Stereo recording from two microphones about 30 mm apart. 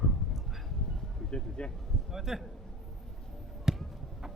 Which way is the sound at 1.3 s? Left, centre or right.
Left.